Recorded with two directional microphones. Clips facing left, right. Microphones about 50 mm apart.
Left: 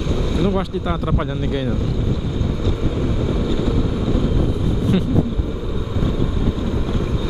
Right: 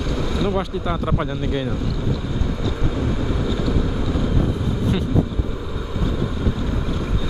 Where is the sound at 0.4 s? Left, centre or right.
Centre.